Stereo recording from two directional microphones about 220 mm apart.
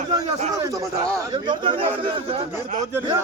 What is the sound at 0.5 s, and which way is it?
A man's voice, 15° right (ahead or behind).